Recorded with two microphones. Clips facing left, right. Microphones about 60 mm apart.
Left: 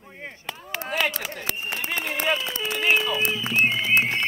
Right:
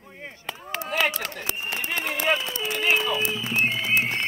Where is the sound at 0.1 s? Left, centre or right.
Centre.